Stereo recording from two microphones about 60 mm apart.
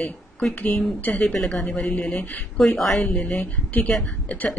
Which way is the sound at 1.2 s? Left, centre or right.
Centre.